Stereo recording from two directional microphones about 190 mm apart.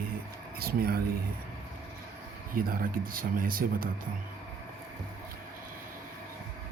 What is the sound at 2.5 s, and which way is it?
Speech, 50° right (ahead or behind).